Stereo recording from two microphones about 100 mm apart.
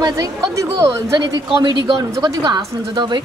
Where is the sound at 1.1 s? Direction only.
45° right (ahead or behind).